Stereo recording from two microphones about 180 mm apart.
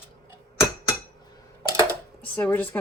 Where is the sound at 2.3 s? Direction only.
10° left (ahead or behind).